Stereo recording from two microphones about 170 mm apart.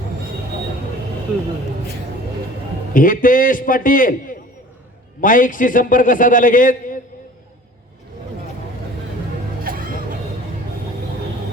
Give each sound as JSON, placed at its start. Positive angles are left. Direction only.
{"t": 2.9, "sound": "a man's voice", "side_deg": 50}
{"t": 9.6, "sound": "music", "side_deg": -55}